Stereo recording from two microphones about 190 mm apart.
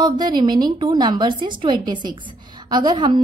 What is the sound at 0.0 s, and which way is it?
A woman's voice, 25° right (ahead or behind).